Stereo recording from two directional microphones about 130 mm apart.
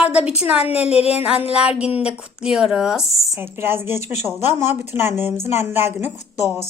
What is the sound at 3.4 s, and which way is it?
A child's voice, 15° right (ahead or behind).